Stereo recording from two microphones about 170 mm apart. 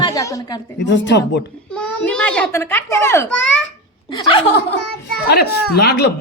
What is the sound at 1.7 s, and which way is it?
A child's voice, 5° left (ahead or behind).